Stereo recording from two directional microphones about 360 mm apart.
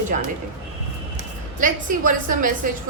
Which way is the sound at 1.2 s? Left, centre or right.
Right.